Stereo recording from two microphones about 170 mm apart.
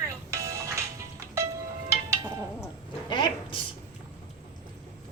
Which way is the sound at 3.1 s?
30° left (ahead or behind).